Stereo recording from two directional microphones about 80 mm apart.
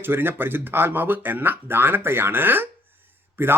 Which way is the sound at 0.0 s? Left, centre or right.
Right.